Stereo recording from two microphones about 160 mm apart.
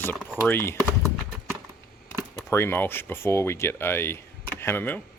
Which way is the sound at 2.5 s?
15° left (ahead or behind).